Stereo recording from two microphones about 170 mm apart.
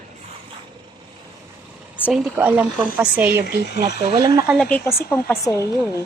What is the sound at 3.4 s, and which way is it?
Speech, 80° left.